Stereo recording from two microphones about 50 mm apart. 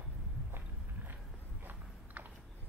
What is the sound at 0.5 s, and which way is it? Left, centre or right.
Walk, right.